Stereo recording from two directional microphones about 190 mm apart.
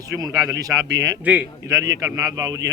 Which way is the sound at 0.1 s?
20° right (ahead or behind).